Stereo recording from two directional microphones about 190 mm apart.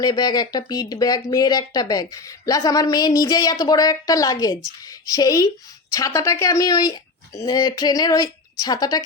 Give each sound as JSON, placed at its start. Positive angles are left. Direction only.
{"t": 0.0, "sound": "speech", "side_deg": 20}